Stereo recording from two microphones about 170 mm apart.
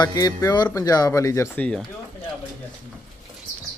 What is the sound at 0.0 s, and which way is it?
Speech, 20° left (ahead or behind).